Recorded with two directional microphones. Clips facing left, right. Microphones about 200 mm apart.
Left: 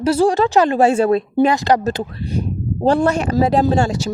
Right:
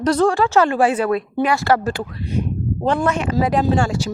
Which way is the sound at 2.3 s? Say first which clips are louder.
Right 3 dB; 35° left (ahead or behind).